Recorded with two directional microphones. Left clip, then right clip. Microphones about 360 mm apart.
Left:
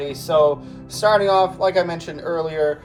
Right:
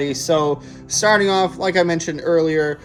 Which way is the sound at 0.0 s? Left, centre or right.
Right.